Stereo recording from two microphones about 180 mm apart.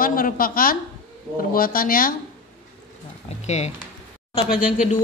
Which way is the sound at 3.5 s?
35° left (ahead or behind).